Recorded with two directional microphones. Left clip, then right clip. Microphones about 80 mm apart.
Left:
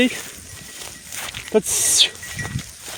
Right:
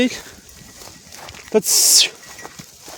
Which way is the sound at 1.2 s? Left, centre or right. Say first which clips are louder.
Right 1 dB; centre.